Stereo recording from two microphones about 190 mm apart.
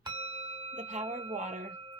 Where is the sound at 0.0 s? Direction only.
30° right (ahead or behind).